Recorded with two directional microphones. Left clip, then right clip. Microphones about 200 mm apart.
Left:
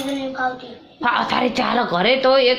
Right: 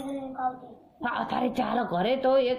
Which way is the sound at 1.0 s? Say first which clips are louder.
Left 10 dB; 15° right (ahead or behind).